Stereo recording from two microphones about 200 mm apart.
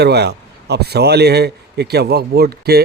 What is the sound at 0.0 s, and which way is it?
Speech, 55° right (ahead or behind).